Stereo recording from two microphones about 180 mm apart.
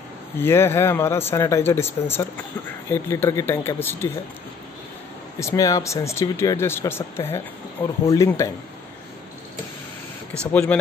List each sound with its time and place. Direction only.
0.4 s speech: 15° left (ahead or behind)
5.4 s speech: 15° left (ahead or behind)
10.4 s speech: 5° left (ahead or behind)